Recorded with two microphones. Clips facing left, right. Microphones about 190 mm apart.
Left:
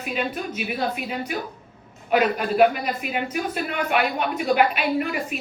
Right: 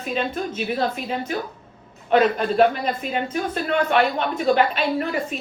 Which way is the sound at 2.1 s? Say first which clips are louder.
Right 3 dB; 10° left (ahead or behind).